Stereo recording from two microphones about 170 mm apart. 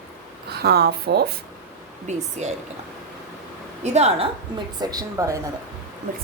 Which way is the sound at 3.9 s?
40° right (ahead or behind).